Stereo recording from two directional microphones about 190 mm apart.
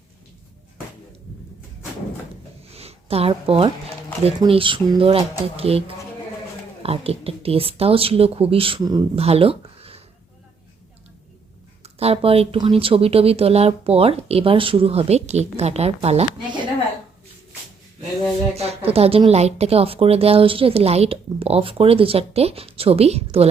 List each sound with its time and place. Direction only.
2.7 s a sound: 30° right (ahead or behind)
4.4 s speech: 30° right (ahead or behind)
6.8 s speech: 30° right (ahead or behind)
11.8 s speech: 30° right (ahead or behind)
18.5 s speech: 30° right (ahead or behind)